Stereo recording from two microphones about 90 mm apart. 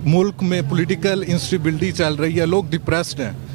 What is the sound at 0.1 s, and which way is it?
Speech, 15° right (ahead or behind).